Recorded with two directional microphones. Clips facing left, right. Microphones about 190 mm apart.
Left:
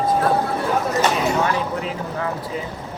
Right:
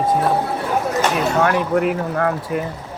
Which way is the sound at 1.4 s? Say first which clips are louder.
Right 6 dB; 60° right (ahead or behind).